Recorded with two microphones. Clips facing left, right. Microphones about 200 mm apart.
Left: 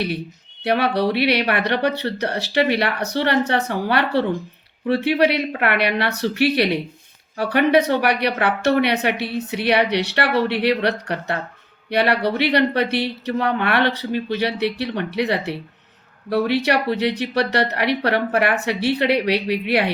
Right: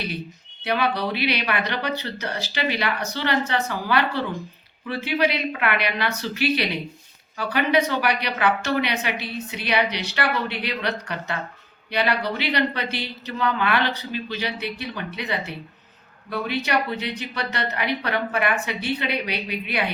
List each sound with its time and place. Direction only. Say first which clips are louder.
0.6 s a woman's voice: left 5 dB; 60° left (ahead or behind)